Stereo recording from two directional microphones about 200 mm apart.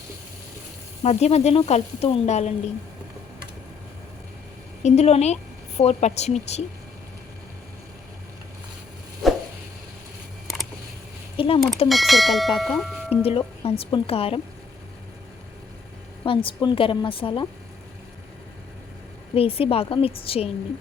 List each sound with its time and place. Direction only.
1.0 s speech: 35° left (ahead or behind)
4.8 s a woman's voice: 35° left (ahead or behind)
10.4 s a sound: centre (ahead or behind)
11.3 s speech: 25° left (ahead or behind)
11.9 s speech: centre (ahead or behind)
12.8 s tubular bells: centre (ahead or behind)
13.2 s speech: 30° left (ahead or behind)
16.2 s speech: 25° left (ahead or behind)
19.3 s speech: 30° left (ahead or behind)